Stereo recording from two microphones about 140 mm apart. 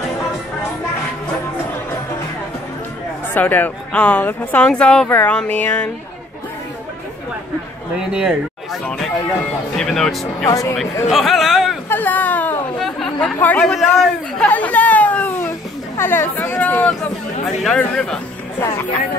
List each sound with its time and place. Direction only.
3.3 s speech: 10° left (ahead or behind)
8.1 s speech: 5° right (ahead or behind)
8.8 s speech: 5° left (ahead or behind)
10.4 s speech: 25° left (ahead or behind)
11.1 s chatter: centre (ahead or behind)
11.9 s whimper: 10° left (ahead or behind)
12.8 s chatter: 5° left (ahead or behind)
14.4 s a sound: 10° left (ahead or behind)
16.0 s chatter: 15° left (ahead or behind)
17.6 s speech: 5° left (ahead or behind)